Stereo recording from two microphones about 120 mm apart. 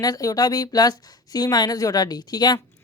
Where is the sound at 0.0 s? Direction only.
30° left (ahead or behind).